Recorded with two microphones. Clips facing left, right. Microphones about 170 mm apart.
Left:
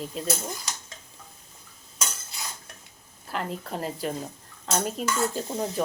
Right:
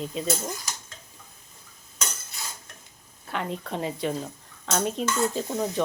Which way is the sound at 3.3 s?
Centre (ahead or behind).